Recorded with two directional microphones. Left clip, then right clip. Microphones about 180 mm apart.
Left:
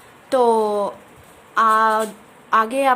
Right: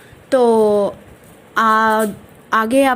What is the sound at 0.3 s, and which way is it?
Speech, 5° right (ahead or behind).